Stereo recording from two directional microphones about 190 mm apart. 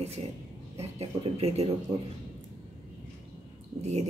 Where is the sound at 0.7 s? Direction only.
30° right (ahead or behind).